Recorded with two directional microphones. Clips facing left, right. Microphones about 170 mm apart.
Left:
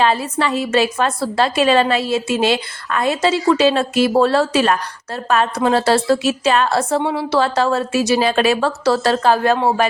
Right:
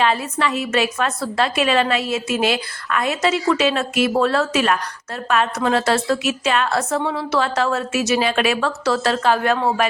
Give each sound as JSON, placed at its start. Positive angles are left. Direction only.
{"t": 0.0, "sound": "a woman's voice", "side_deg": 35}